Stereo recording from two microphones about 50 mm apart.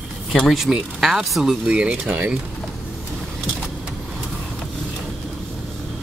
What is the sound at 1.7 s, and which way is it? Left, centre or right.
Speech, right.